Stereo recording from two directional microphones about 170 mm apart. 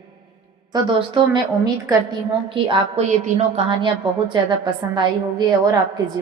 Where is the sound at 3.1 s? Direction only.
45° right (ahead or behind).